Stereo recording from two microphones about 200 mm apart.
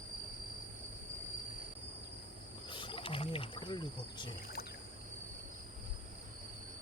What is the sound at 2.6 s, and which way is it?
Speech, 25° left (ahead or behind).